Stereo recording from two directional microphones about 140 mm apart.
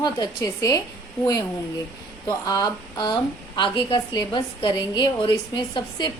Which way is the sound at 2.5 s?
30° left (ahead or behind).